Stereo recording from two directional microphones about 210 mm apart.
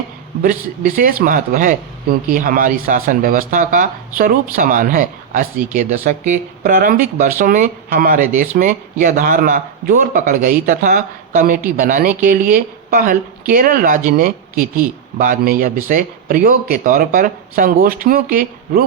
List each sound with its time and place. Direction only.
0.4 s speech: 40° right (ahead or behind)